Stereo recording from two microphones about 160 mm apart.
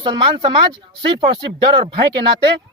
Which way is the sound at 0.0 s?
30° right (ahead or behind).